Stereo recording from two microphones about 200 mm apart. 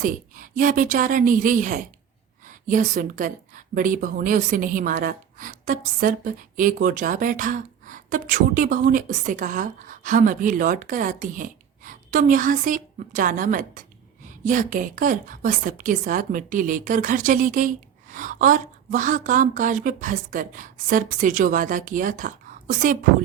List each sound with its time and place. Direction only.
0.0 s speech: 40° right (ahead or behind)